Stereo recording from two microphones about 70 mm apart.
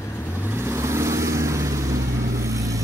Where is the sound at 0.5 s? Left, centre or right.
Right.